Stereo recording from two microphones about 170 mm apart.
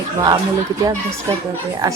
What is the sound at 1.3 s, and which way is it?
Speech, 25° right (ahead or behind).